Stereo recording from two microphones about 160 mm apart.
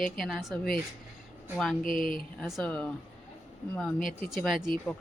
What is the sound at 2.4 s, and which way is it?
Speech, centre (ahead or behind).